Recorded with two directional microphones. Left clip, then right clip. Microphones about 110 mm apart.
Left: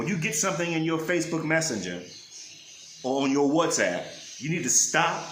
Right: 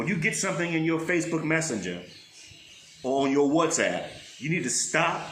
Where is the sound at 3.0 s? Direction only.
30° left (ahead or behind).